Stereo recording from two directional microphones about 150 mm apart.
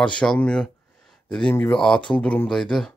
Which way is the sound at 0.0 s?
5° left (ahead or behind).